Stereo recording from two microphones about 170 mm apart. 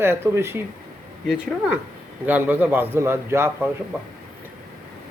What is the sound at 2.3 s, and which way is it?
Speech, 10° right (ahead or behind).